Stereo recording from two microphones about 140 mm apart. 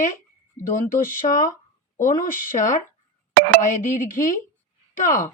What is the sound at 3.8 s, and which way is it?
Speech, 70° left (ahead or behind).